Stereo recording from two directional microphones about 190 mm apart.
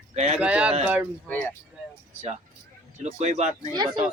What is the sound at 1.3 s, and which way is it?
Speech, 10° left (ahead or behind).